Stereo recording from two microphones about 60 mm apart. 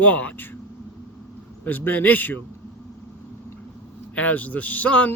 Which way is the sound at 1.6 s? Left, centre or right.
Left.